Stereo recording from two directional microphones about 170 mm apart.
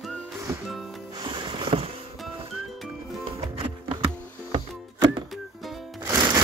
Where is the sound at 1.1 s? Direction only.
30° right (ahead or behind).